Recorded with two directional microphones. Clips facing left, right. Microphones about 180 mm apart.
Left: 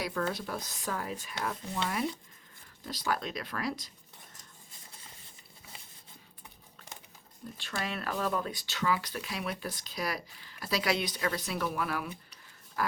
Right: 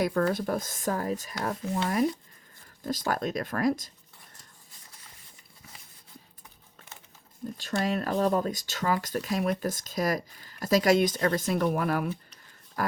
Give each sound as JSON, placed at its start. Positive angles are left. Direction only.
{"t": 0.0, "sound": "speech", "side_deg": -50}
{"t": 7.5, "sound": "speech", "side_deg": -40}